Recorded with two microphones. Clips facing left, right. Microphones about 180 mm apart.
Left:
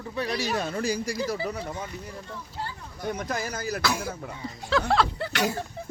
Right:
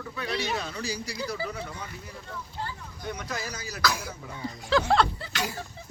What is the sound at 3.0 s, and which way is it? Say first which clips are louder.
Speech: left 5 dB; 50° left (ahead or behind).